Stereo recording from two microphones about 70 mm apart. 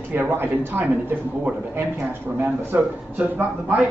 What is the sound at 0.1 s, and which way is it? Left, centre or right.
A man's voice, right.